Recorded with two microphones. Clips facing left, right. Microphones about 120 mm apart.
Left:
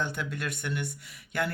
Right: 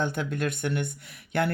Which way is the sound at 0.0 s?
50° right (ahead or behind).